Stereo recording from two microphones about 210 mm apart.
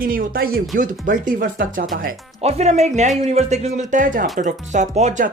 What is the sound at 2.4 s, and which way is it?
Speech, 30° right (ahead or behind).